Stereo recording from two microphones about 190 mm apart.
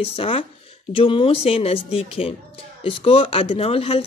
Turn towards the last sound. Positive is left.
turn(degrees=30)  # may be behind; listen again after turning